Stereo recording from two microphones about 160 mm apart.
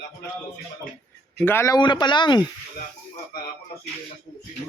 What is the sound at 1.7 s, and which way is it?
Speech, 25° left (ahead or behind).